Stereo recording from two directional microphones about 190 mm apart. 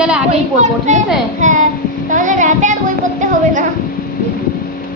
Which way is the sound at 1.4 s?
40° right (ahead or behind).